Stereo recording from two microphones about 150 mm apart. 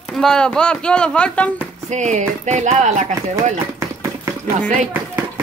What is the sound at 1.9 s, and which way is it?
Speech, 50° right (ahead or behind).